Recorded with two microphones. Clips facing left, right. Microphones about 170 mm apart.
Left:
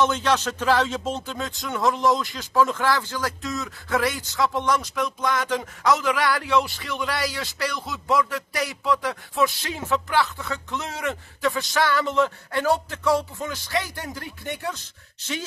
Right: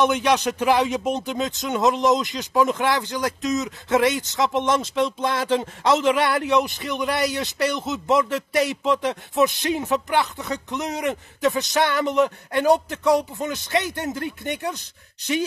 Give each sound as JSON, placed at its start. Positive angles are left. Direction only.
{"t": 0.0, "sound": "speech", "side_deg": -15}